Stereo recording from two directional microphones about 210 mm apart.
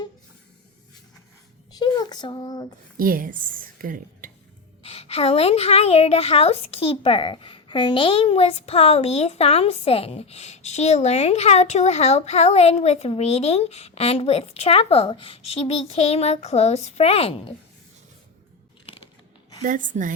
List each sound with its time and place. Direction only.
1.8 s a sound: 20° left (ahead or behind)
3.0 s a woman's voice: 40° right (ahead or behind)
4.8 s a woman's voice: 30° left (ahead or behind)
19.6 s a woman's voice: 40° right (ahead or behind)